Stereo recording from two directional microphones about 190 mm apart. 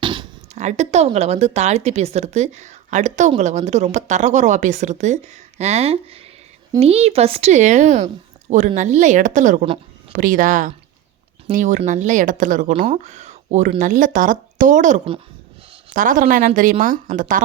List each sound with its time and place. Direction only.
0.0 s a sound: 25° right (ahead or behind)
0.5 s a woman's voice: 35° right (ahead or behind)
12.7 s a woman's voice: 30° right (ahead or behind)